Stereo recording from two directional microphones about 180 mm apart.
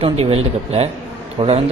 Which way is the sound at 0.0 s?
35° right (ahead or behind).